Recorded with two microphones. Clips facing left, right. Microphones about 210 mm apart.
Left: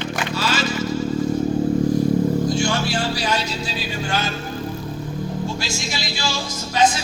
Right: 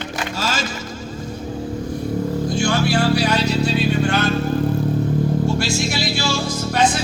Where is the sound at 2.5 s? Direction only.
60° right (ahead or behind).